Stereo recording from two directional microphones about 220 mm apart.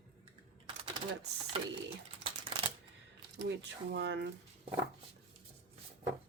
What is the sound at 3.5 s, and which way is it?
Speech, 50° right (ahead or behind).